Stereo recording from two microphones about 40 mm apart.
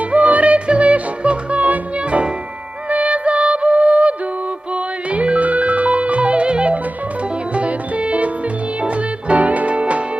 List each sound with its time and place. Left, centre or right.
0.0 s music: right